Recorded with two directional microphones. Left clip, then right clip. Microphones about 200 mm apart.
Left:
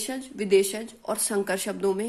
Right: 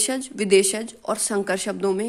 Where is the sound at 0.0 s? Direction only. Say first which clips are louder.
Right 6 dB; 30° right (ahead or behind).